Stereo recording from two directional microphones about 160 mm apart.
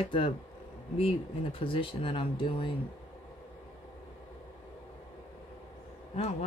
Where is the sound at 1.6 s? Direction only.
35° left (ahead or behind).